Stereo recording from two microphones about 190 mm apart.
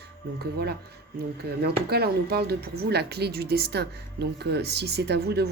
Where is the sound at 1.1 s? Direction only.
55° right (ahead or behind).